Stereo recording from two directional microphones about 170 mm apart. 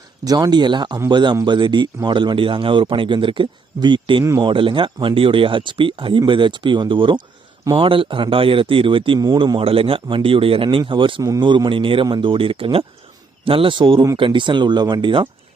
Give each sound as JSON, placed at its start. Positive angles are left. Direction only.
{"t": 0.3, "sound": "speech", "side_deg": -25}
{"t": 4.2, "sound": "speech", "side_deg": -15}
{"t": 4.4, "sound": "speech", "side_deg": -30}